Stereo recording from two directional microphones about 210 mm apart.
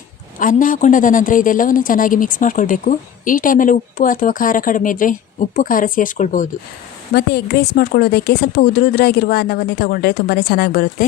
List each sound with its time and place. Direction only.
0.3 s a woman's voice: 40° left (ahead or behind)
7.1 s speech: 50° left (ahead or behind)